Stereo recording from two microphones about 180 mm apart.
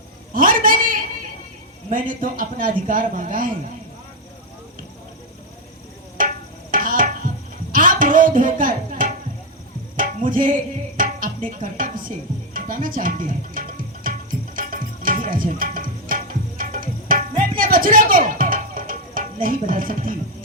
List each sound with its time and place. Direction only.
0.3 s a sound: 50° right (ahead or behind)
1.9 s a man's voice: 50° right (ahead or behind)
6.7 s music: 50° right (ahead or behind)
7.7 s a sound: 50° right (ahead or behind)
10.0 s music: 50° right (ahead or behind)
16.6 s tabla: 50° right (ahead or behind)
17.6 s music: 50° right (ahead or behind)